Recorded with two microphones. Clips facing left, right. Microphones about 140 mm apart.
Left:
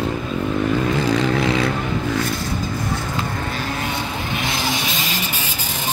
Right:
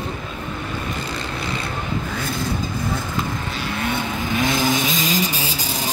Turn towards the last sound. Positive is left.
turn(degrees=-40)  # may be behind; listen again after turning